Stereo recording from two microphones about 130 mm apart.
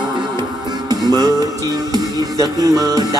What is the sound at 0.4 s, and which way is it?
Music, 30° right (ahead or behind).